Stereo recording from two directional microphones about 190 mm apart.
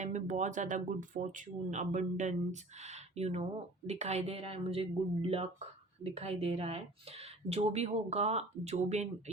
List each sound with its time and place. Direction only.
0.0 s speech: 40° right (ahead or behind)